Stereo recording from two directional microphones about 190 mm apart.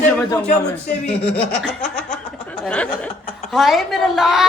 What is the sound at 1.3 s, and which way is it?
Speech, 5° left (ahead or behind).